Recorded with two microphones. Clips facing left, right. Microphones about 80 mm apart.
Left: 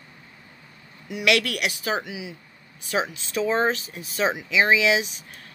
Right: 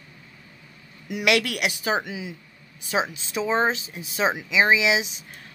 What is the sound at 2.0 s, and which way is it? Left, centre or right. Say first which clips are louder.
Speech: right 1 dB; right.